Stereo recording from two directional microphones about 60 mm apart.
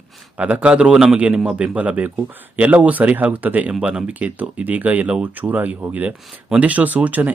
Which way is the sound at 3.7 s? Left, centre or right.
Centre.